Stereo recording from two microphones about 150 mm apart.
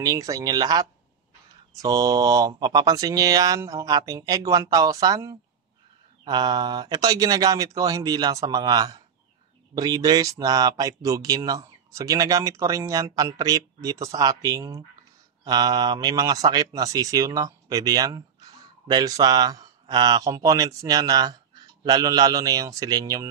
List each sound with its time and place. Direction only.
0.0 s speech: 25° right (ahead or behind)